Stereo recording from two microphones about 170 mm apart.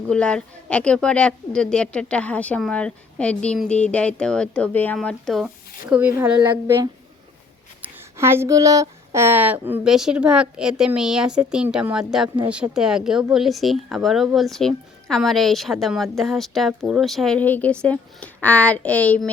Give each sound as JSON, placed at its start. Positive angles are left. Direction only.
{"t": 0.1, "sound": "a woman's voice", "side_deg": 5}
{"t": 5.9, "sound": "a woman's voice", "side_deg": -10}
{"t": 6.4, "sound": "a woman's voice", "side_deg": -25}